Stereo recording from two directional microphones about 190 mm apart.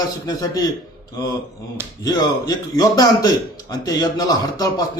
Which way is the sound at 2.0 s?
20° left (ahead or behind).